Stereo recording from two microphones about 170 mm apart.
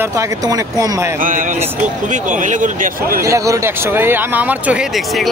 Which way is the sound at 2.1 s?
45° right (ahead or behind).